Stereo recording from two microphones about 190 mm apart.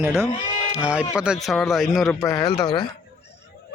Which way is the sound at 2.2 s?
20° left (ahead or behind).